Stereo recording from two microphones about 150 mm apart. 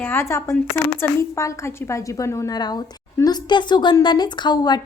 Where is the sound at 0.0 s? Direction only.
15° left (ahead or behind).